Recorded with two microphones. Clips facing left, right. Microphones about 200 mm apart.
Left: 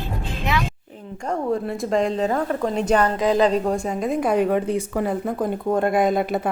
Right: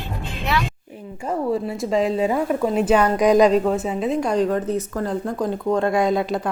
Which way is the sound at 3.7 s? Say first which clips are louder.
Right 1 dB; 5° right (ahead or behind).